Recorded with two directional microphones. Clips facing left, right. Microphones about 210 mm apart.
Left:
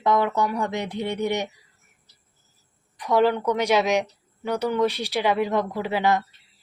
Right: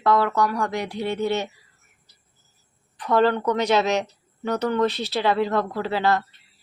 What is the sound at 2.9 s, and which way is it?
Speech, 10° left (ahead or behind).